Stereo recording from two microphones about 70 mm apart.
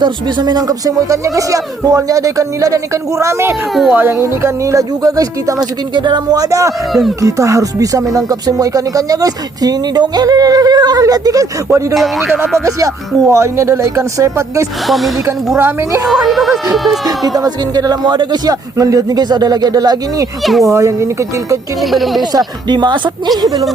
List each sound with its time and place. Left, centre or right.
0.0 s speech: right
11.0 s speech: right
11.9 s speech: centre
12.6 s speech: right
14.8 s speech: centre
15.5 s speech: right
16.0 s speech: centre
17.3 s speech: right
20.4 s speech: centre
20.7 s speech: right
21.8 s speech: centre
22.2 s speech: right